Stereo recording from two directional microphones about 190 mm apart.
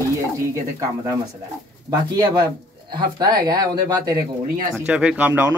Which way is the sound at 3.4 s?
20° right (ahead or behind).